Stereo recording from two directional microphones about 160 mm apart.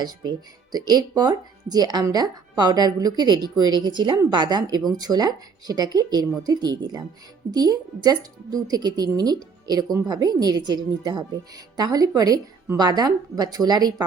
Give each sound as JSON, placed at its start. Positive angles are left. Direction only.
{"t": 0.0, "sound": "speech", "side_deg": -25}